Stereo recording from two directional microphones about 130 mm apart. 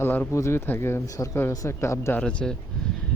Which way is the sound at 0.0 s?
15° left (ahead or behind).